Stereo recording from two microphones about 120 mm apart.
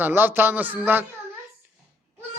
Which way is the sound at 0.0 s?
15° right (ahead or behind).